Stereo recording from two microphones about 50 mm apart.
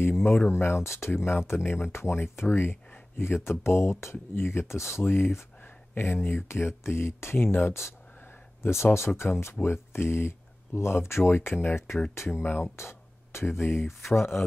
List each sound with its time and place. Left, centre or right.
0.0 s speech: left
3.2 s speech: left
5.0 s speech: left
6.5 s speech: left
7.3 s speech: left
8.6 s speech: left
12.7 s speech: left